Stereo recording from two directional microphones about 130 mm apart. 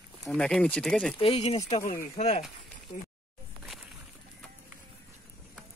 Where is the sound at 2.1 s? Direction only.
60° left (ahead or behind).